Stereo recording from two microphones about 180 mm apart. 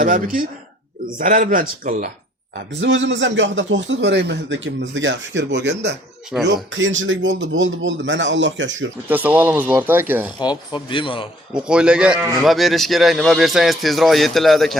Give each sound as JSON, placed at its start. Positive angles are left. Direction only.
{"t": 0.0, "sound": "speech", "side_deg": -50}
{"t": 2.8, "sound": "a man's voice", "side_deg": -90}
{"t": 9.0, "sound": "speech", "side_deg": -10}
{"t": 10.4, "sound": "speech", "side_deg": 25}
{"t": 11.5, "sound": "speech", "side_deg": -5}